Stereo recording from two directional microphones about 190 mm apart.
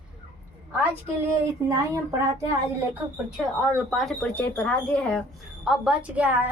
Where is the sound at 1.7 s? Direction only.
15° right (ahead or behind).